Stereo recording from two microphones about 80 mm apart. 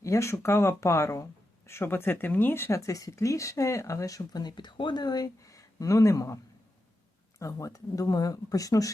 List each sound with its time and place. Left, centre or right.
0.0 s speech: left
2.7 s speech: left